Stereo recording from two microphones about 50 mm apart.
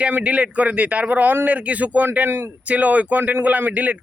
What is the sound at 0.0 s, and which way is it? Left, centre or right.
A man's voice, right.